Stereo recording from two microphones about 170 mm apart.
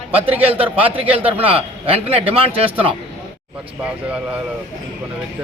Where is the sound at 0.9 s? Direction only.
35° right (ahead or behind).